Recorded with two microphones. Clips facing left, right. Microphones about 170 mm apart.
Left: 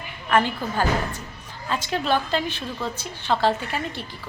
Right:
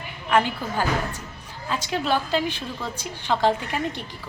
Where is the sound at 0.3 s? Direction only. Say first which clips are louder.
Even; 10° right (ahead or behind).